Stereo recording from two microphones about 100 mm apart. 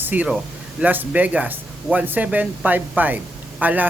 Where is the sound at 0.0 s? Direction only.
20° right (ahead or behind).